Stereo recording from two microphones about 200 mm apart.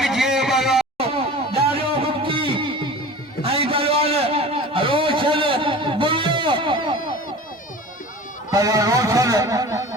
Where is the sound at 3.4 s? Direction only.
30° right (ahead or behind).